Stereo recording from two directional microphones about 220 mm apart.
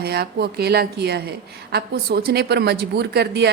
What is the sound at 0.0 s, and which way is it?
Speech, 45° right (ahead or behind).